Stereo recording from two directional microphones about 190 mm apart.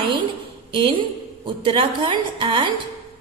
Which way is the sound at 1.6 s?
25° right (ahead or behind).